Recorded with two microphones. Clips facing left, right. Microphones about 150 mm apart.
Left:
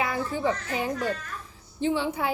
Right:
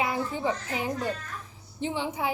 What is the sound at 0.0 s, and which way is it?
A child's voice, 20° right (ahead or behind).